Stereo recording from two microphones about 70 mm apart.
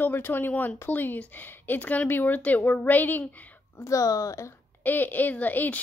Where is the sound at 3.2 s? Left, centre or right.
Left.